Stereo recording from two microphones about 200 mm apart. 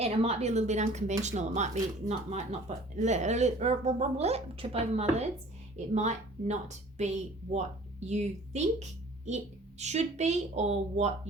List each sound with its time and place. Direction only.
0.0 s a woman's voice: 30° right (ahead or behind)